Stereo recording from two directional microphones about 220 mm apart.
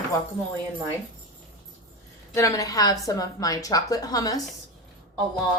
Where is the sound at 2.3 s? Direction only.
15° left (ahead or behind).